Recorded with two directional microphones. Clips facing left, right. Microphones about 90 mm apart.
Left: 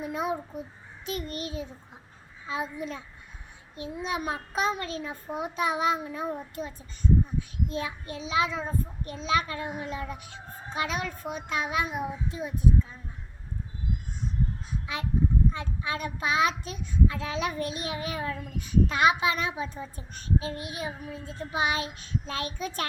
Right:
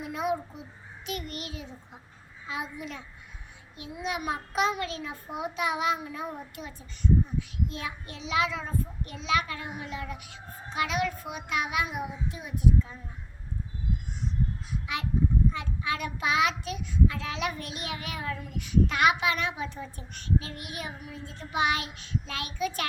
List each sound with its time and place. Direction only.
0.0 s a sound: 30° left (ahead or behind)
1.0 s a child's voice: 30° left (ahead or behind)
15.5 s child singing: 30° left (ahead or behind)